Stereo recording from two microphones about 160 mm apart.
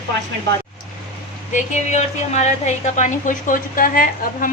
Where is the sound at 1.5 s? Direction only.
45° left (ahead or behind).